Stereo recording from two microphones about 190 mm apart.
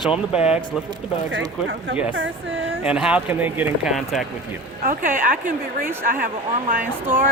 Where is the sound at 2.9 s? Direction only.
5° right (ahead or behind).